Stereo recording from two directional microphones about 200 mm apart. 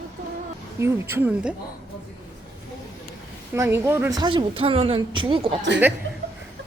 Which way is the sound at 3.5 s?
15° right (ahead or behind).